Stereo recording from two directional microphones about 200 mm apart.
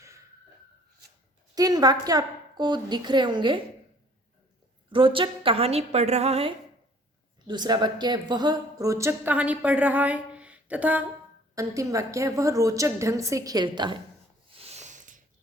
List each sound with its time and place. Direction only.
1.5 s a woman's voice: 20° right (ahead or behind)
4.9 s a woman's voice: 25° right (ahead or behind)
14.5 s a sound: 30° right (ahead or behind)